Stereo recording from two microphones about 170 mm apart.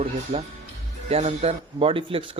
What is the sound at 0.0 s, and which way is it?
Speech, 35° right (ahead or behind).